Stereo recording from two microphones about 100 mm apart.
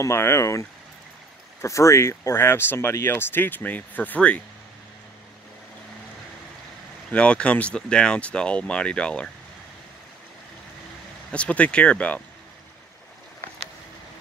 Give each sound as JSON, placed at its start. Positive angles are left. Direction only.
{"t": 0.0, "sound": "speech", "side_deg": 25}
{"t": 7.1, "sound": "speech", "side_deg": 15}
{"t": 11.3, "sound": "speech", "side_deg": 10}